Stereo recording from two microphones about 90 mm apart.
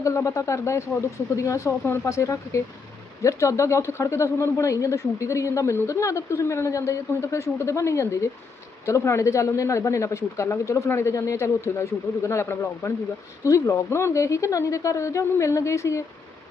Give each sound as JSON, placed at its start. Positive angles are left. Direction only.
{"t": 0.0, "sound": "speech", "side_deg": 35}